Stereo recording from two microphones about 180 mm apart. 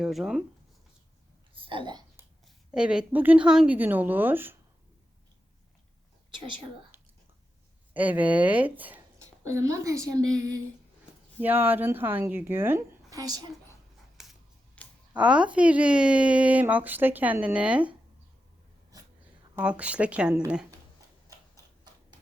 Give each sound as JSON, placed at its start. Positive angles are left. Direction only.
{"t": 0.0, "sound": "speech", "side_deg": 0}
{"t": 1.5, "sound": "a woman's voice", "side_deg": -30}
{"t": 2.7, "sound": "speech", "side_deg": -5}
{"t": 6.9, "sound": "a sound", "side_deg": -10}
{"t": 7.9, "sound": "a woman's voice", "side_deg": -10}
{"t": 14.2, "sound": "a sound", "side_deg": 0}
{"t": 15.1, "sound": "speech", "side_deg": -5}
{"t": 19.5, "sound": "speech", "side_deg": -5}